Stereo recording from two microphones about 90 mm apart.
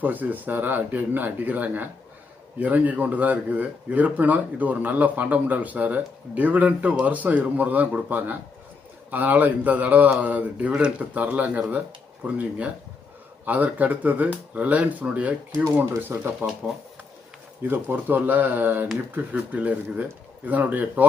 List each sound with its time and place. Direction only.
0.0 s speech: 20° right (ahead or behind)
17.6 s speech: 20° right (ahead or behind)